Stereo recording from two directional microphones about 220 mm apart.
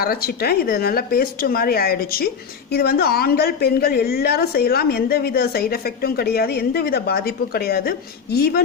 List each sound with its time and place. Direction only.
0.0 s speech: 45° left (ahead or behind)